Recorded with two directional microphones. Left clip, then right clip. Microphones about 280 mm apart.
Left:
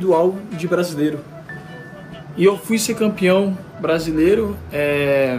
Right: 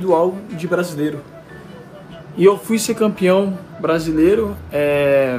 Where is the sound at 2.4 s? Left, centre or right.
Centre.